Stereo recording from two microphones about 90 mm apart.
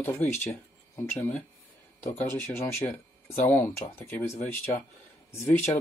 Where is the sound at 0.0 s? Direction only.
20° left (ahead or behind).